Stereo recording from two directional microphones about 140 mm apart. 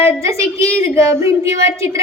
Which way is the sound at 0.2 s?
20° right (ahead or behind).